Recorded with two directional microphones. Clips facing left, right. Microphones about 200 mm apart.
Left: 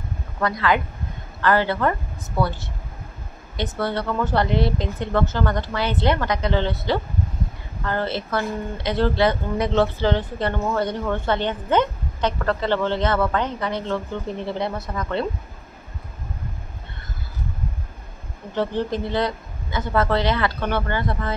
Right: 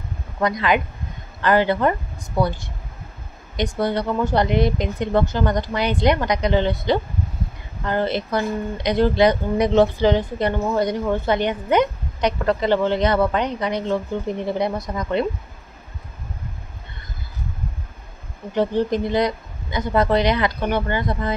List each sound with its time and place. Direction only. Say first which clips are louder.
0.4 s speech: right 2 dB; 15° right (ahead or behind)
18.5 s speech: right 4 dB; 15° right (ahead or behind)